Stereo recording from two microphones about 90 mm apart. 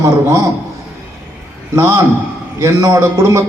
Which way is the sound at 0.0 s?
35° right (ahead or behind).